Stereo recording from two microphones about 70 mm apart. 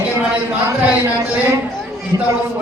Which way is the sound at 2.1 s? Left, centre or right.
Right.